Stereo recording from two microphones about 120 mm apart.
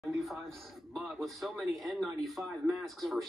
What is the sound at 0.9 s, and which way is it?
Speech, centre (ahead or behind).